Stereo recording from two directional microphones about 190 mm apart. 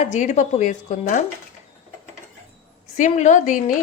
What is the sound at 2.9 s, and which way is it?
Speech, 40° left (ahead or behind).